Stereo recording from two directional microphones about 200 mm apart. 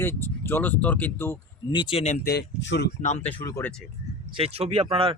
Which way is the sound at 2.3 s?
55° left (ahead or behind).